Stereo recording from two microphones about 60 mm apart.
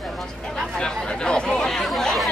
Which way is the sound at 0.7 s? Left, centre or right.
Centre.